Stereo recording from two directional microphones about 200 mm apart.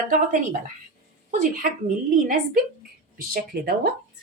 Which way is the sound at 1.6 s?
45° right (ahead or behind).